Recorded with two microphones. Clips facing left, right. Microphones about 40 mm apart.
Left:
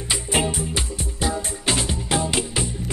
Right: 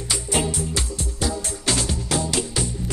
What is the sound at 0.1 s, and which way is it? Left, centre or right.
Music, left.